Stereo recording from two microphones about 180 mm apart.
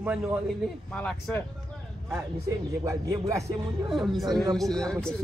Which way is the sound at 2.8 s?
20° right (ahead or behind).